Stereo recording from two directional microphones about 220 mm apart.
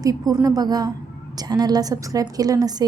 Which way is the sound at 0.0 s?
15° right (ahead or behind).